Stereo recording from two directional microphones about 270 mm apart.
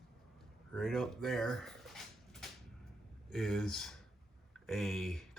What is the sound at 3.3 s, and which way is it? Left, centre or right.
Speech, centre.